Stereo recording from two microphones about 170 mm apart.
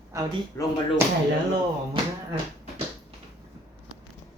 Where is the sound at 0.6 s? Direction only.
15° left (ahead or behind).